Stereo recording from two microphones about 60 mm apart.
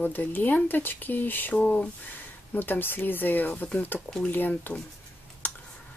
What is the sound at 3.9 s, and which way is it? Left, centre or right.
Speech, centre.